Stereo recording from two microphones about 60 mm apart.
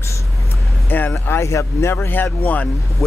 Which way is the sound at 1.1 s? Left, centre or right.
Left.